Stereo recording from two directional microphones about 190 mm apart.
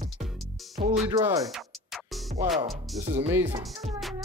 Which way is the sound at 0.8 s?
35° right (ahead or behind).